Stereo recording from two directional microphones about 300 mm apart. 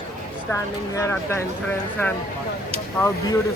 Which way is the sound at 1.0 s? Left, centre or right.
Centre.